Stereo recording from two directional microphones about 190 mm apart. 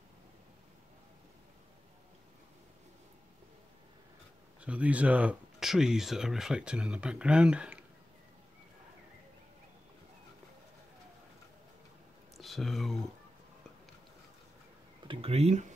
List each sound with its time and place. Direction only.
4.6 s speech: 5° right (ahead or behind)
12.4 s speech: centre (ahead or behind)
15.0 s speech: 30° right (ahead or behind)